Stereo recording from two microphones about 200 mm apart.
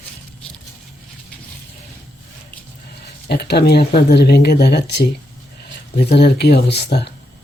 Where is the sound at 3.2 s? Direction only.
55° left (ahead or behind).